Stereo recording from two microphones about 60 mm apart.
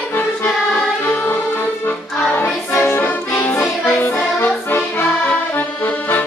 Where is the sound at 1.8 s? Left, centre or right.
Left.